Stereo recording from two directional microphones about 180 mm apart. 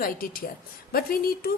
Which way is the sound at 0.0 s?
55° left (ahead or behind).